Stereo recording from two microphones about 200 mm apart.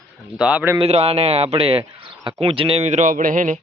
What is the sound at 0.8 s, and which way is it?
A man's voice, 30° right (ahead or behind).